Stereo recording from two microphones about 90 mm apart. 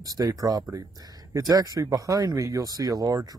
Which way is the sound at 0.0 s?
45° right (ahead or behind).